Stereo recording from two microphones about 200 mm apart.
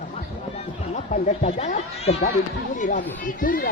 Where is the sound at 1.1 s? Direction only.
35° left (ahead or behind).